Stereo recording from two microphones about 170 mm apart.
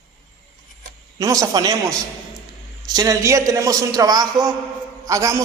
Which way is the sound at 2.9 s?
20° right (ahead or behind).